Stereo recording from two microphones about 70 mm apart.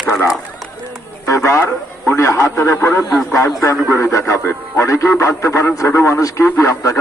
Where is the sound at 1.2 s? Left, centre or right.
Left.